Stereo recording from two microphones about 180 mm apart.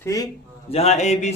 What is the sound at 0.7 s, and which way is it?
Speech, 35° left (ahead or behind).